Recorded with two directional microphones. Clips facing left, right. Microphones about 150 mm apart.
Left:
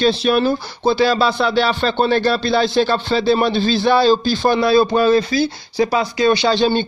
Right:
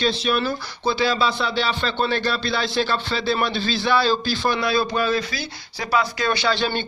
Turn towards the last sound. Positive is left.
turn(degrees=25)  # may be behind; listen again after turning